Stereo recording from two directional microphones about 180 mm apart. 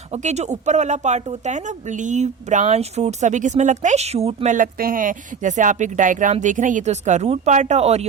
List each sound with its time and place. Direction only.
0.1 s speech: 40° right (ahead or behind)
4.5 s speech: 50° right (ahead or behind)